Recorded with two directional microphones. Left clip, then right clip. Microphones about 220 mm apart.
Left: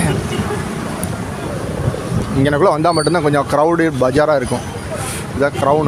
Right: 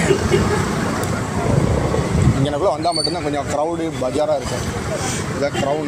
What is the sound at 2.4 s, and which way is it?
Speech, 45° left (ahead or behind).